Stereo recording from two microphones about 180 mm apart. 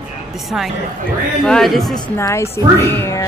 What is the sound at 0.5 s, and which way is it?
Speech, centre (ahead or behind).